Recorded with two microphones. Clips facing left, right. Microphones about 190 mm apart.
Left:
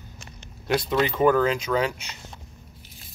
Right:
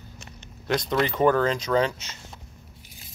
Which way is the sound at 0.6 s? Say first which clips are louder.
Left 1 dB; 5° left (ahead or behind).